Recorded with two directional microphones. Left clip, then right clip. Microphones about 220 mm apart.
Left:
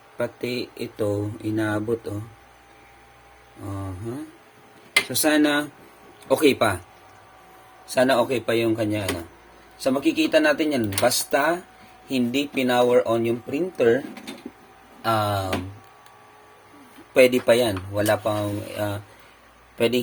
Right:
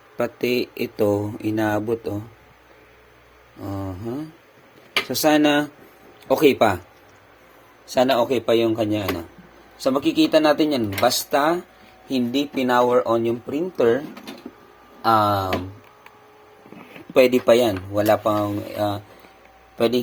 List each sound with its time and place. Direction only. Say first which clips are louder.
0.2 s speech: right 5 dB; 25° right (ahead or behind)
3.7 s speech: right 4 dB; 20° right (ahead or behind)
7.9 s speech: right 1 dB; 10° right (ahead or behind)
15.0 s speech: right 5 dB; 10° right (ahead or behind)
17.2 s speech: right 2 dB; 10° right (ahead or behind)